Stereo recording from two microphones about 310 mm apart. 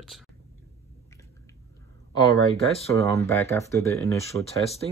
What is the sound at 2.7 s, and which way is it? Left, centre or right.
Speech, centre.